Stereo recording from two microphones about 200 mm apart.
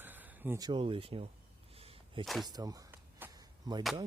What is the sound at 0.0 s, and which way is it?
Speech, 10° right (ahead or behind).